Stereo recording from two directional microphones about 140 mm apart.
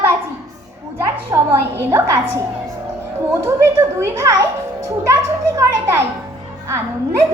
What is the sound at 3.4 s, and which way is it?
A child's voice, 20° right (ahead or behind).